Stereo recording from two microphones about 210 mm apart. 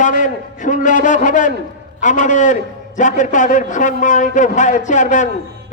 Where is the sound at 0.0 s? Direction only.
35° left (ahead or behind).